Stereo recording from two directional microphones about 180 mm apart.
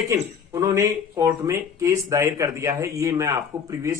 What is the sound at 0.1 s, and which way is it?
Speech, 15° right (ahead or behind).